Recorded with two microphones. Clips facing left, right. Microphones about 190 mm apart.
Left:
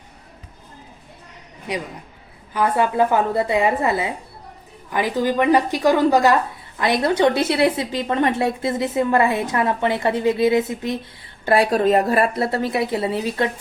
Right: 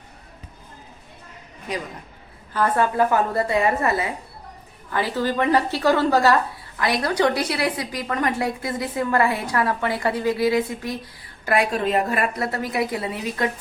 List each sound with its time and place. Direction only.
2.5 s a woman's voice: 15° left (ahead or behind)